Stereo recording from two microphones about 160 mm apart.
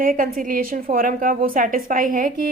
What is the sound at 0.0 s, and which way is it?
A woman's voice, 60° right (ahead or behind).